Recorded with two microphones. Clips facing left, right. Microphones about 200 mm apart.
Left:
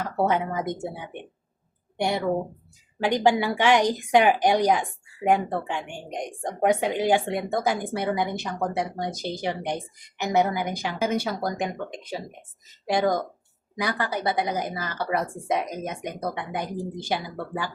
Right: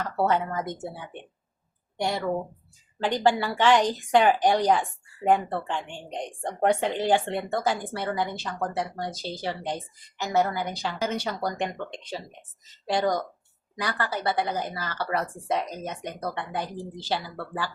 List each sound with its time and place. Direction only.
0.0 s speech: 15° left (ahead or behind)
3.0 s speech: 15° left (ahead or behind)